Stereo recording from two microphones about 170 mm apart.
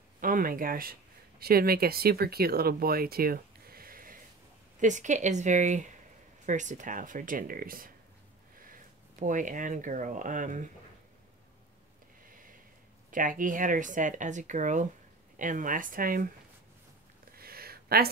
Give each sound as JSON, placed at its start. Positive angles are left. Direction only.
{"t": 0.2, "sound": "speech", "side_deg": -55}
{"t": 4.7, "sound": "speech", "side_deg": -45}
{"t": 9.2, "sound": "speech", "side_deg": -50}
{"t": 13.1, "sound": "speech", "side_deg": -50}
{"t": 17.4, "sound": "a sound", "side_deg": -60}